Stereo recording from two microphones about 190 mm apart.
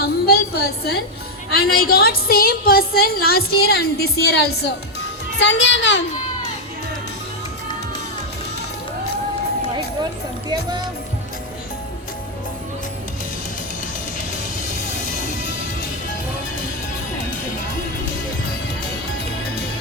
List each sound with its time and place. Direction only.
0.0 s a woman's voice: 55° left (ahead or behind)
5.4 s a child's voice: 75° left (ahead or behind)
10.5 s speech: 20° right (ahead or behind)